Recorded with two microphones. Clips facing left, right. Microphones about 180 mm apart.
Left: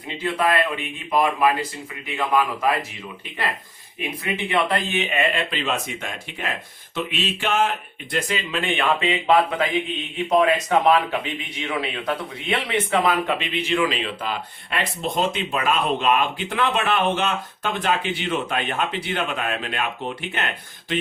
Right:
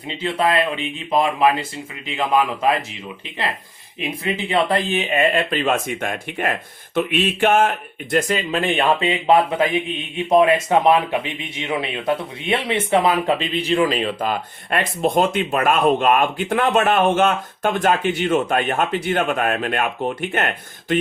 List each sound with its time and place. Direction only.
0.2 s speech: 25° right (ahead or behind)
4.2 s speech: 30° right (ahead or behind); by 20.5 s 50° right (ahead or behind)